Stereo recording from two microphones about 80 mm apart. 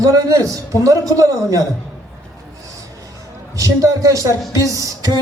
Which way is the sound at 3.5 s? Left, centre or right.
Right.